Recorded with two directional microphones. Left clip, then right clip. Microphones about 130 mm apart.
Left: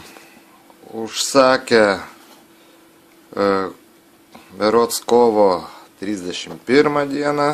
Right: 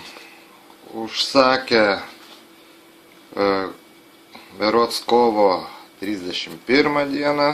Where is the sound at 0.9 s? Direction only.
90° left.